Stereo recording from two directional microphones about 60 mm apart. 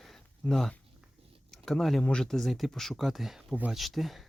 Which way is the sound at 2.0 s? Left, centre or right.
Centre.